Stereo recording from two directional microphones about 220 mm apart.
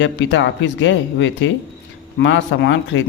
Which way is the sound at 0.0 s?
55° left (ahead or behind).